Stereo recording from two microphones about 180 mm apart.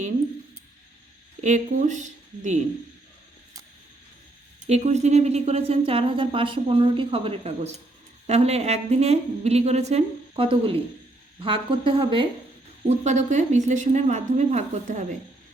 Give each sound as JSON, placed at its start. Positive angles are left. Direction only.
{"t": 1.4, "sound": "a woman's voice", "side_deg": -40}
{"t": 4.6, "sound": "speech", "side_deg": -40}
{"t": 12.9, "sound": "speech", "side_deg": -40}